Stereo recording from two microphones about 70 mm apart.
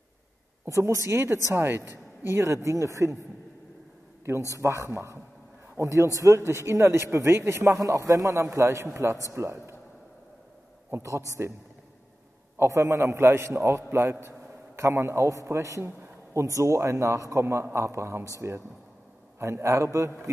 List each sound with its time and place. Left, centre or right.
0.7 s a man's voice: right
4.6 s a man's voice: right
10.9 s speech: right
12.5 s a man's voice: right